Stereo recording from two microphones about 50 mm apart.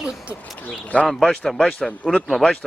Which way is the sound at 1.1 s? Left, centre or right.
Centre.